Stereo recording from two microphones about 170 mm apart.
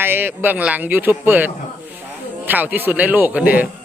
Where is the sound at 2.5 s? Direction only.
10° right (ahead or behind).